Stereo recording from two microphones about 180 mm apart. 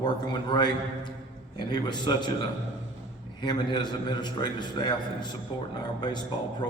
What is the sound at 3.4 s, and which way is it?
A man's voice, 25° left (ahead or behind).